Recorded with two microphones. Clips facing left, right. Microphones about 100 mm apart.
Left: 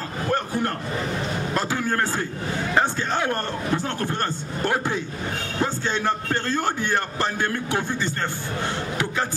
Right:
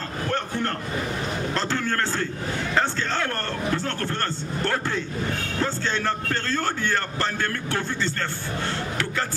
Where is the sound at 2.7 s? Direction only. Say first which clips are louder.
Left 2 dB; 15° left (ahead or behind).